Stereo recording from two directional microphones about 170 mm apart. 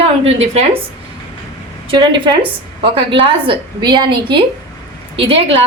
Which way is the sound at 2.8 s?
30° right (ahead or behind).